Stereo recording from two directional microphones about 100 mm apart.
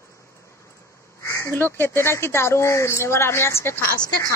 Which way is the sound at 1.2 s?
30° left (ahead or behind).